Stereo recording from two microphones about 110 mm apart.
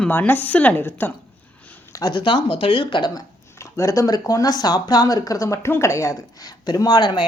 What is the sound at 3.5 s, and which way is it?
A woman's voice, 25° left (ahead or behind).